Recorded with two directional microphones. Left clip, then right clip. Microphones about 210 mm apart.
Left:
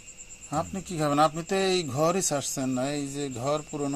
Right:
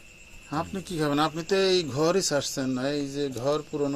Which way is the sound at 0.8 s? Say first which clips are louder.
Left 3 dB; 50° left (ahead or behind).